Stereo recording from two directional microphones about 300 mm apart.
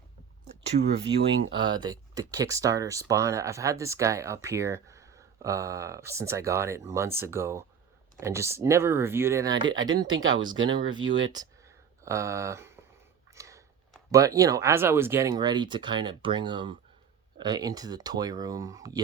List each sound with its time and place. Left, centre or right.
1.1 s speech: centre
10.2 s speech: right
10.7 s speech: centre
11.0 s speech: right
11.3 s a sound: centre
14.1 s speech: centre